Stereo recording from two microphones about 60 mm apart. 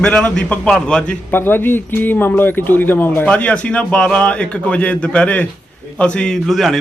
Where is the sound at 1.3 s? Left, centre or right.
Left.